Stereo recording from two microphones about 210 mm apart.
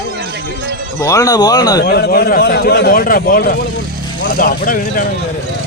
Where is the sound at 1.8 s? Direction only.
45° left (ahead or behind).